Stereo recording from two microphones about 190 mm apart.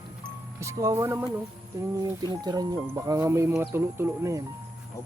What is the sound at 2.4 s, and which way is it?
Speech, 20° right (ahead or behind).